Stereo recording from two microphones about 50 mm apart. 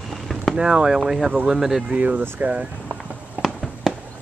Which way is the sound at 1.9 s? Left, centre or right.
Right.